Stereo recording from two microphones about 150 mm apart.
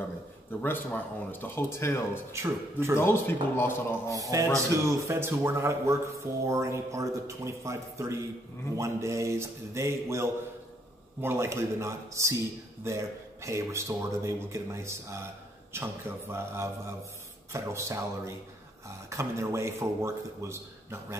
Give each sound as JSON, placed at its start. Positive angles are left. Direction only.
{"t": 0.5, "sound": "speech", "side_deg": 15}
{"t": 2.3, "sound": "a man's voice", "side_deg": -15}
{"t": 3.0, "sound": "speech", "side_deg": 15}
{"t": 4.1, "sound": "a man's voice", "side_deg": -20}